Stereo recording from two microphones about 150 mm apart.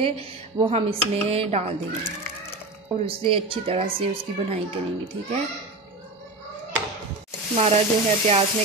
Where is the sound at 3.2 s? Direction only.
35° right (ahead or behind).